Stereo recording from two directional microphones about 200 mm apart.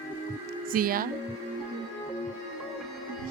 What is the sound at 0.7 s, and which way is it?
Speech, 45° right (ahead or behind).